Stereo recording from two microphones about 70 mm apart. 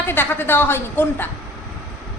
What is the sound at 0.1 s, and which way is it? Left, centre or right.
A woman's voice, left.